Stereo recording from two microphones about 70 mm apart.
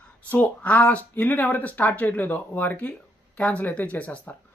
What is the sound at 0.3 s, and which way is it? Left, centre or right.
Speech, left.